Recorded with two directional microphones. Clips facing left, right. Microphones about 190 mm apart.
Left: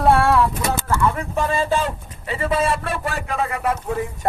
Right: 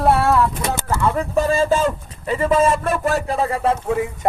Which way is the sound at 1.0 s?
40° right (ahead or behind).